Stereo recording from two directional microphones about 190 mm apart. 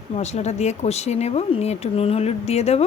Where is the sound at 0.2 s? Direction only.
35° left (ahead or behind).